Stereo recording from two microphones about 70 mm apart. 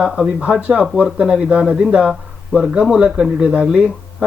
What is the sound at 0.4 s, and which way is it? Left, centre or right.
Speech, centre.